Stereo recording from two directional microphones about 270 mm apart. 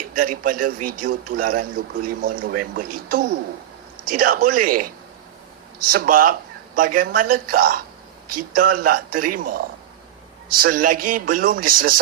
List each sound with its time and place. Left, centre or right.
0.2 s speech: right
0.8 s speech: right
1.0 s speech: right
5.9 s speech: right